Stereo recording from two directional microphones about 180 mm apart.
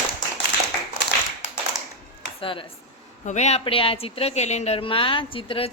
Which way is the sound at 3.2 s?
40° left (ahead or behind).